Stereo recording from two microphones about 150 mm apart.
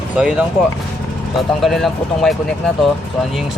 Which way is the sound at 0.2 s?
5° right (ahead or behind).